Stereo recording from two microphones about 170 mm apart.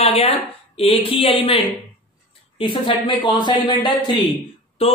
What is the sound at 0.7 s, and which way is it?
Speech, 35° left (ahead or behind).